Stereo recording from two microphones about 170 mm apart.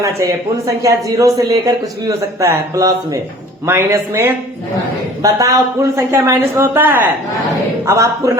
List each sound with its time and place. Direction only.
0.0 s a man's voice: 20° right (ahead or behind)